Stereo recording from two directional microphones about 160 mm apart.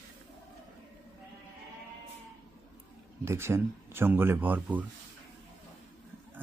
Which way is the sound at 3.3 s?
15° right (ahead or behind).